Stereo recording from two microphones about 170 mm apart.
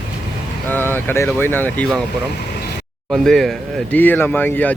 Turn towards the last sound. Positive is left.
turn(degrees=10)  # may be behind; listen again after turning